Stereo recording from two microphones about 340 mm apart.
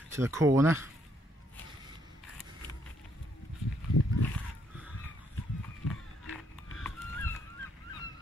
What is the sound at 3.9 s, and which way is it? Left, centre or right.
Pig, left.